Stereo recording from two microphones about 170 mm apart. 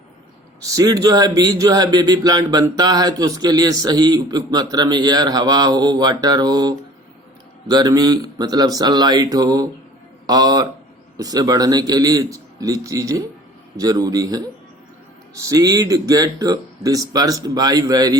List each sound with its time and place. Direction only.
0.8 s speech: 20° right (ahead or behind)